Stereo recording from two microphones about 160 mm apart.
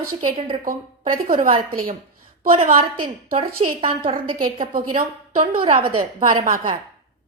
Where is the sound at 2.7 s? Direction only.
35° right (ahead or behind).